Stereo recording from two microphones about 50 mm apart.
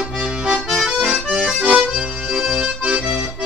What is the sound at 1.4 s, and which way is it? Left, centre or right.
Accordion, right.